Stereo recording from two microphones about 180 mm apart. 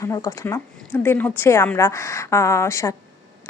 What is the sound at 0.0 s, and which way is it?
A woman's voice, 20° left (ahead or behind).